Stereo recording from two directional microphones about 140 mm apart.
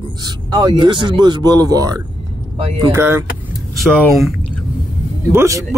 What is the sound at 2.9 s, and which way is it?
Speech, 15° right (ahead or behind).